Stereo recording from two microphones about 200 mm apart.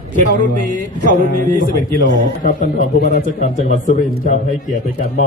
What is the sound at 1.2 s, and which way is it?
Speech, 40° right (ahead or behind).